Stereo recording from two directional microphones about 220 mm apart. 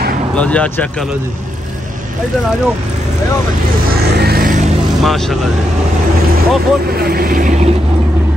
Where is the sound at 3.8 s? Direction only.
45° right (ahead or behind).